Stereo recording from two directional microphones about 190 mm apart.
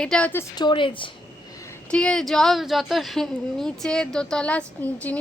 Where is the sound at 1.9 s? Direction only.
5° left (ahead or behind).